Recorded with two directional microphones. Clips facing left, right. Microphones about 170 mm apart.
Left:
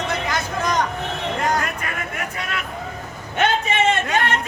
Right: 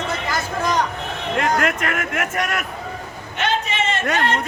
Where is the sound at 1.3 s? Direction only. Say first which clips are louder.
Right 4 dB; 85° right.